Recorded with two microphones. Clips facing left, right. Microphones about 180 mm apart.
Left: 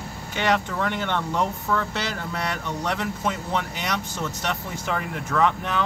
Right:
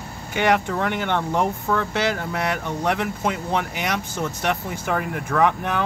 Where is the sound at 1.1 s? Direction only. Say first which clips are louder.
Right 3 dB; 55° right (ahead or behind).